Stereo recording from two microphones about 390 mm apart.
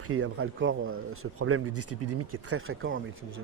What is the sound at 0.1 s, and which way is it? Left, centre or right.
Speech, right.